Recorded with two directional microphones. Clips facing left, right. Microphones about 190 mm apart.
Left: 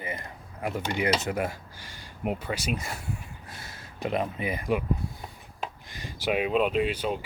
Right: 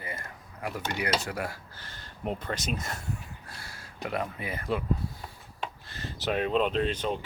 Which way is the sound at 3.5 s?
20° left (ahead or behind).